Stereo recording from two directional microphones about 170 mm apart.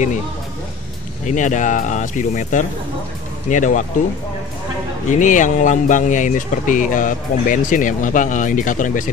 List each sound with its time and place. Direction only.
1.2 s speech: 45° left (ahead or behind)
5.0 s speech: 50° left (ahead or behind)